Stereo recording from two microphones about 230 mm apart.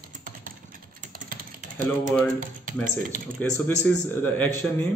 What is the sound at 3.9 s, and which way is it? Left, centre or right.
Speech, centre.